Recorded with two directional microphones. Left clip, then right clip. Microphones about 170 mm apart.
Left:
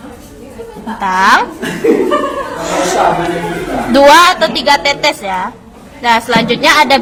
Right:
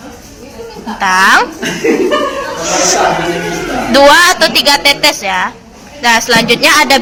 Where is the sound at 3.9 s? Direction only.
5° left (ahead or behind).